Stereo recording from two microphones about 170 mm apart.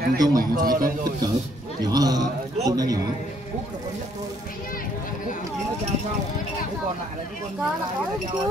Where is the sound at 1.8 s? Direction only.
20° right (ahead or behind).